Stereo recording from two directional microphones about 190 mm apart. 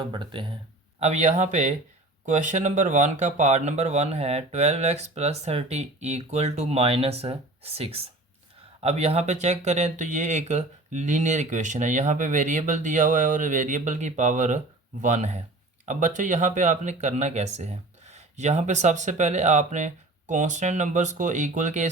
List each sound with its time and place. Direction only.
0.0 s speech: 25° right (ahead or behind)
0.9 s speech: 35° right (ahead or behind)